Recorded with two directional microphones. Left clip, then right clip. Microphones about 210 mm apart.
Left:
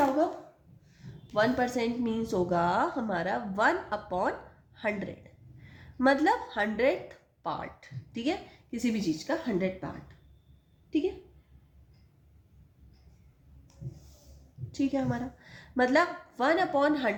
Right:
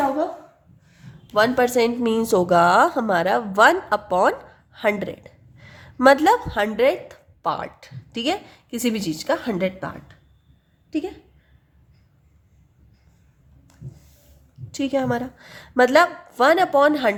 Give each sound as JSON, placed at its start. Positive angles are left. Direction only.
{"t": 1.3, "sound": "a woman's voice", "side_deg": -40}
{"t": 14.7, "sound": "a woman's voice", "side_deg": -40}